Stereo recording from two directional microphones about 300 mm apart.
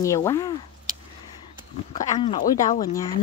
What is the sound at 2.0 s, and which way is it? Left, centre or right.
Speech, centre.